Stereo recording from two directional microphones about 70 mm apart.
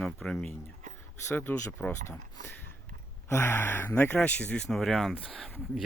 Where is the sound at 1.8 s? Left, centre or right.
Centre.